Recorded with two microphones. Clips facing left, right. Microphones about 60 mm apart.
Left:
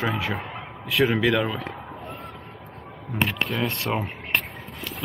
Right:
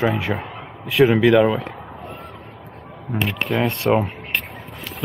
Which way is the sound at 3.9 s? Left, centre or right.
Right.